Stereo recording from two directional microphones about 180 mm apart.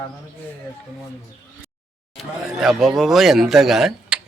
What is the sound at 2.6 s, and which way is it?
Speech, centre (ahead or behind).